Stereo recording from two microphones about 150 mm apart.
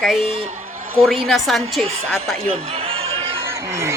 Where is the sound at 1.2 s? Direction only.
Centre (ahead or behind).